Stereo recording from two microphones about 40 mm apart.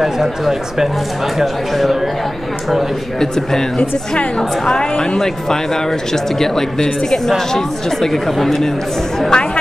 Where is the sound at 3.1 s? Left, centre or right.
Centre.